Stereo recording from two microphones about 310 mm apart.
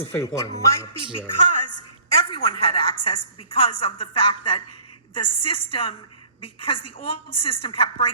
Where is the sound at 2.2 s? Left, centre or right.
Centre.